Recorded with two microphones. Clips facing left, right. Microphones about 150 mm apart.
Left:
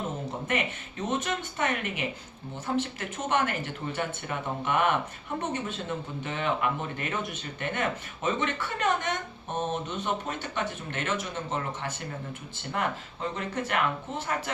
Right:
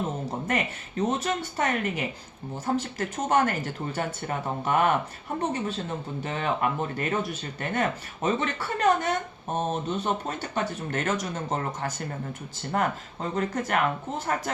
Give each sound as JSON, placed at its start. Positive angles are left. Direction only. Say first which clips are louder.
{"t": 0.3, "sound": "speech", "louder": "right 2 dB", "side_deg": -40}